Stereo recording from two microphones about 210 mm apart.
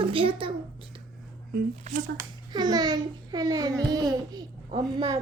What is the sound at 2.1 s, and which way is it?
A child's voice, 20° right (ahead or behind).